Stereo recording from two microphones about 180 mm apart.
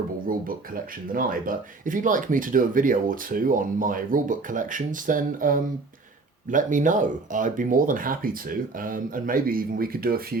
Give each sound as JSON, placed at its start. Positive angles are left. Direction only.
{"t": 1.1, "sound": "speech", "side_deg": -50}